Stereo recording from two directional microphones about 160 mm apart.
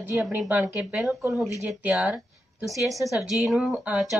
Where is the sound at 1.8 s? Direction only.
10° right (ahead or behind).